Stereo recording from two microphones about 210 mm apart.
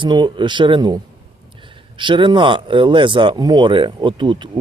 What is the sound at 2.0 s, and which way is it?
Speech, 25° right (ahead or behind).